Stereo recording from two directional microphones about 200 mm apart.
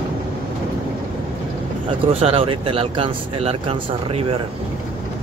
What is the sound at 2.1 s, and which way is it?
Speech, 30° right (ahead or behind).